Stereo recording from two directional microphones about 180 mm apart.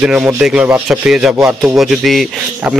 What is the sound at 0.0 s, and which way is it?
A man's voice, 5° right (ahead or behind).